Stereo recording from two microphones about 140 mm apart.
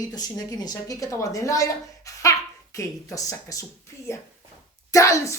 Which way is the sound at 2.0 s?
25° left (ahead or behind).